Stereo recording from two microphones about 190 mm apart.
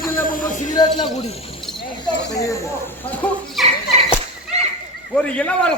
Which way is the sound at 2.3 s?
15° left (ahead or behind).